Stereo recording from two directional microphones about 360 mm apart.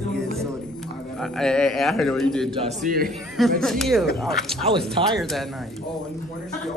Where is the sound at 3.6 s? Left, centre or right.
Centre.